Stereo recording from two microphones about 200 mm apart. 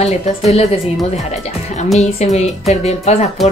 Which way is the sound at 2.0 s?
35° left (ahead or behind).